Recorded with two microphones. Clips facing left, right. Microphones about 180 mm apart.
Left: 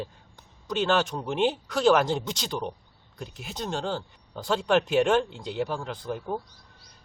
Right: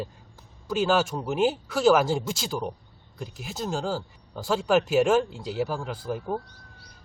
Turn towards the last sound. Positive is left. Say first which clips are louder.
# right 1 dB
turn(degrees=0)  # may be behind; listen again after turning